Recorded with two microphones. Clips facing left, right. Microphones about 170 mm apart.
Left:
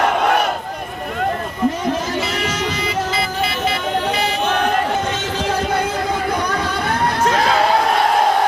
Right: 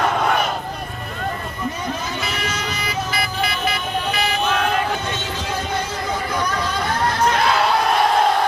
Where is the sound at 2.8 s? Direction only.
25° left (ahead or behind).